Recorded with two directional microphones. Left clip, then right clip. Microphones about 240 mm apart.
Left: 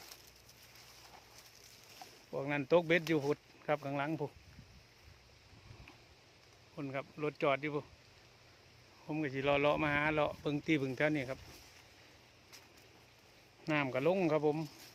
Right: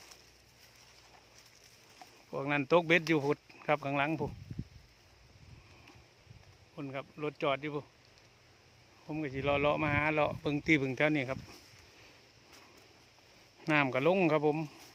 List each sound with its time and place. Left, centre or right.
2.3 s speech: right
6.7 s speech: centre
9.0 s speech: centre; by 11.3 s right
13.7 s speech: right